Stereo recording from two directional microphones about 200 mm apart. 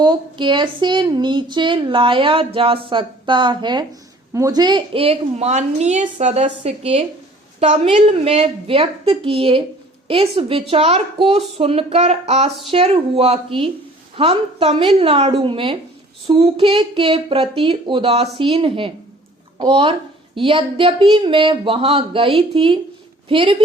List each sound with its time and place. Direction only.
0.0 s a woman's voice: 20° right (ahead or behind)